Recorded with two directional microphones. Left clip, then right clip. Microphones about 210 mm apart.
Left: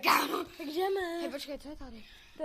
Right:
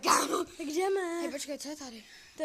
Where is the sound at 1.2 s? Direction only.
20° right (ahead or behind).